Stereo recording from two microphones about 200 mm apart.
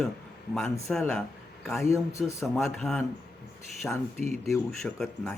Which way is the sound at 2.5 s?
Centre (ahead or behind).